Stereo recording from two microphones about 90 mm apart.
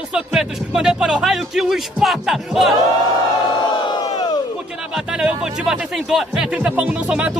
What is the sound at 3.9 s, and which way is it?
Crowd, 50° left (ahead or behind).